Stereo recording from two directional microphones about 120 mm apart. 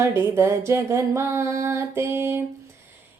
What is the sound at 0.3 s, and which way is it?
Female singing, 20° right (ahead or behind).